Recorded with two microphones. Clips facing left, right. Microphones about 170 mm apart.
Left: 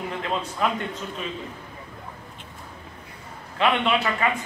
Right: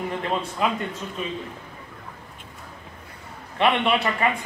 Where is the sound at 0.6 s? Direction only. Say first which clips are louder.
Even; centre (ahead or behind).